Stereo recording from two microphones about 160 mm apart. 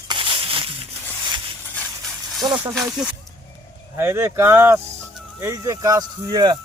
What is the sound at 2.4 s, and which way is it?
Speech, 25° right (ahead or behind).